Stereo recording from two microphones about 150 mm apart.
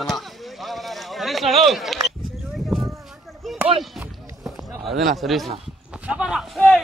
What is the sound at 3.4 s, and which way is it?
Chop, centre (ahead or behind).